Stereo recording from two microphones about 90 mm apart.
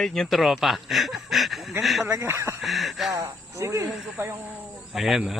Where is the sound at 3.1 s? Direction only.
35° right (ahead or behind).